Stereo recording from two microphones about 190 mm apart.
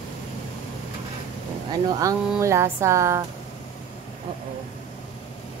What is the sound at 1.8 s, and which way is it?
Speech, 20° right (ahead or behind).